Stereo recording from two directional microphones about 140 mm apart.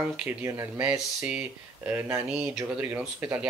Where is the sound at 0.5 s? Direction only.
15° right (ahead or behind).